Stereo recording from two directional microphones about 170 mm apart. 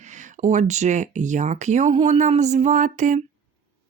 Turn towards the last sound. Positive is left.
turn(degrees=-50)  # may be behind; listen again after turning